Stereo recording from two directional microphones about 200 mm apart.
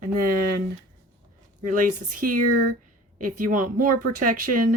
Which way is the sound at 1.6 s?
40° right (ahead or behind).